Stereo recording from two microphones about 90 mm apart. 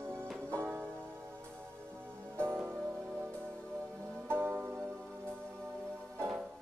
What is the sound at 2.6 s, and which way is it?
Music, 20° right (ahead or behind).